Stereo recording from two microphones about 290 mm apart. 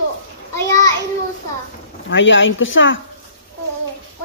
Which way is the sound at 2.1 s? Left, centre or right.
Left.